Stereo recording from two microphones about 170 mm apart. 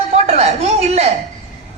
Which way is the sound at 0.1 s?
40° right (ahead or behind).